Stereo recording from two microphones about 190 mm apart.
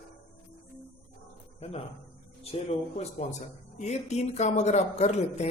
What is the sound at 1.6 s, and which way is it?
Speech, 30° left (ahead or behind).